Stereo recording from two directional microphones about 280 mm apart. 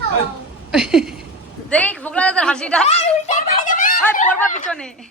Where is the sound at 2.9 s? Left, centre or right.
Left.